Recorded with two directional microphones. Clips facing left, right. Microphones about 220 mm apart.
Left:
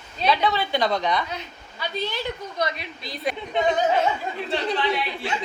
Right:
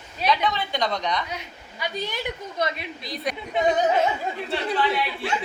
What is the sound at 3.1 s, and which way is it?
Speech, centre (ahead or behind).